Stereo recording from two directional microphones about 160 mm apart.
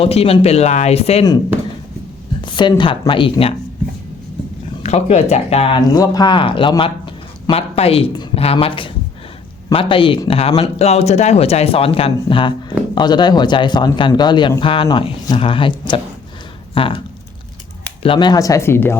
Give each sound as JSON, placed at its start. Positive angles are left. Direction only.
{"t": 0.0, "sound": "speech", "side_deg": 40}
{"t": 2.4, "sound": "speech", "side_deg": 30}
{"t": 4.8, "sound": "speech", "side_deg": 40}
{"t": 18.0, "sound": "speech", "side_deg": 30}